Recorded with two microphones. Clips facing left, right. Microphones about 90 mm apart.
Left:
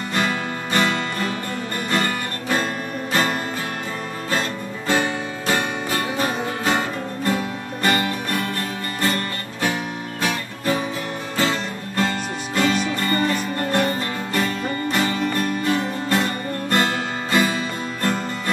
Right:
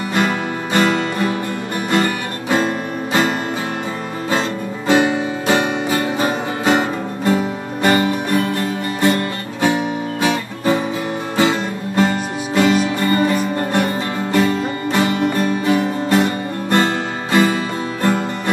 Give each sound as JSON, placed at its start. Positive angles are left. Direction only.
{"t": 0.7, "sound": "music", "side_deg": -20}
{"t": 10.2, "sound": "guitar", "side_deg": -20}
{"t": 11.3, "sound": "music", "side_deg": -15}